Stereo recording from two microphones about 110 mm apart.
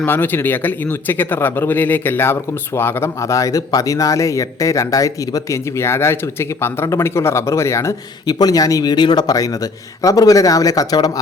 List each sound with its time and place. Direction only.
0.0 s speech: 20° left (ahead or behind); by 11.1 s 35° left (ahead or behind)